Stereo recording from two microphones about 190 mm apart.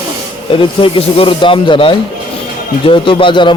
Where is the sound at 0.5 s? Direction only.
25° left (ahead or behind).